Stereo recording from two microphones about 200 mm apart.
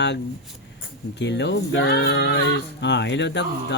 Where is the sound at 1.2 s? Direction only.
60° left (ahead or behind).